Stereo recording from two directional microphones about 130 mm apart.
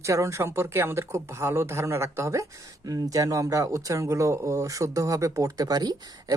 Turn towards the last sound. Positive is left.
turn(degrees=-30)  # may be behind; listen again after turning